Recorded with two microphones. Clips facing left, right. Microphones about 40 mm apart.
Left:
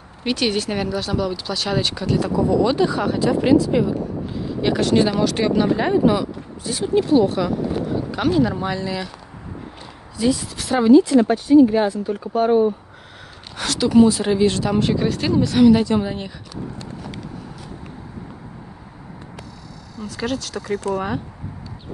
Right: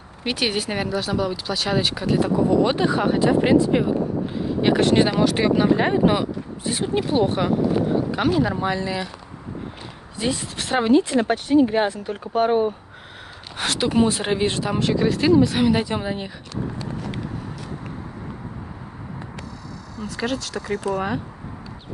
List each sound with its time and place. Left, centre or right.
0.2 s speech: centre
2.3 s speech: right
5.1 s speech: centre
6.0 s speech: right
8.1 s speech: centre
10.1 s speech: right
11.3 s speech: right
13.6 s speech: right
14.5 s speech: centre
14.8 s speech: centre
15.6 s speech: centre
20.1 s speech: centre